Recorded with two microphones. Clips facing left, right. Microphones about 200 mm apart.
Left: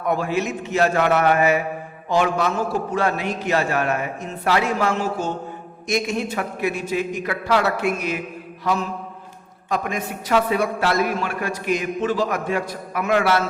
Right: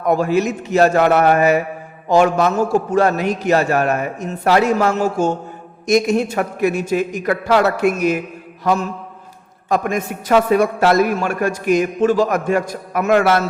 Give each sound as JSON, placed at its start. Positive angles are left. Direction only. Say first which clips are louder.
{"t": 0.1, "sound": "a man's voice", "louder": "right 6 dB", "side_deg": -40}